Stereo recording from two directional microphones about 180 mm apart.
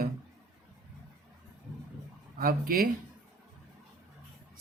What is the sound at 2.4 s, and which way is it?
Speech, 55° right (ahead or behind).